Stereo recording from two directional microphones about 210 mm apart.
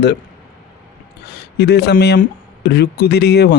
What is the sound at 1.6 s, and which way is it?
Speech, 50° left (ahead or behind).